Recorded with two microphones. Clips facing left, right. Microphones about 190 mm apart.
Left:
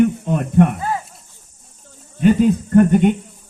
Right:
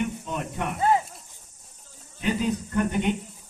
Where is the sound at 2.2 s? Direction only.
50° left (ahead or behind).